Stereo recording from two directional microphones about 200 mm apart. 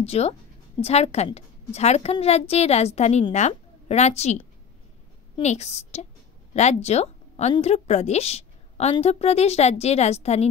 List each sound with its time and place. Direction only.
0.0 s a woman's voice: 30° left (ahead or behind)